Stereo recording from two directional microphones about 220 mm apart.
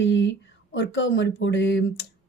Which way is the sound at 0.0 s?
55° left (ahead or behind).